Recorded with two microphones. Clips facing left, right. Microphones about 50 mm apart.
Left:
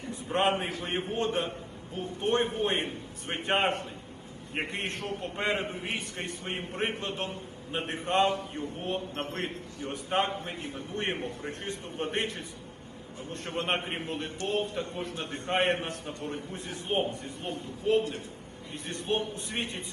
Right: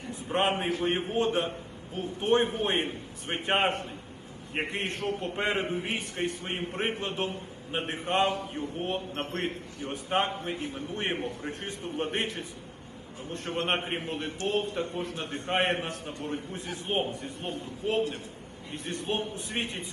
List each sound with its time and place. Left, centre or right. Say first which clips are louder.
0.3 s a man's voice: even; right
19.0 s a man's voice: left 3 dB; right